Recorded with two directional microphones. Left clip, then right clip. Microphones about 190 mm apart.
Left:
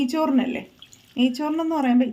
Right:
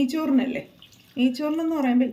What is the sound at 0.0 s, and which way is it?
A woman's voice, 60° left (ahead or behind).